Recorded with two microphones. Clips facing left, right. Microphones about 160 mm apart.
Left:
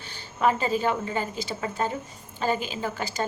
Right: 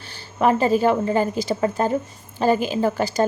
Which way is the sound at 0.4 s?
45° right (ahead or behind).